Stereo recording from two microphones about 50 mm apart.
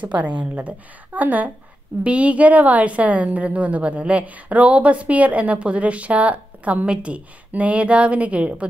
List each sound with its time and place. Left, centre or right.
0.0 s a woman's voice: right